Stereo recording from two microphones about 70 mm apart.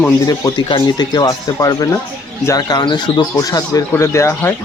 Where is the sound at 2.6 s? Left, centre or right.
Left.